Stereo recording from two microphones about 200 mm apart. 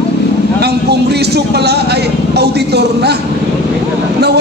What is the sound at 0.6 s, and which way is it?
Speech, 55° right (ahead or behind).